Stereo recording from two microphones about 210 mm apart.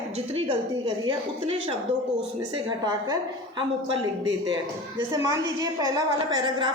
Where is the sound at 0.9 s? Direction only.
25° right (ahead or behind).